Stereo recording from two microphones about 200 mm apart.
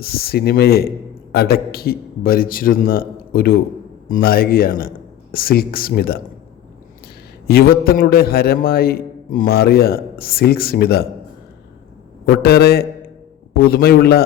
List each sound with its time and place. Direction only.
0.0 s a man's voice: 50° left (ahead or behind)
7.4 s a man's voice: 50° left (ahead or behind)
12.2 s a man's voice: 55° left (ahead or behind)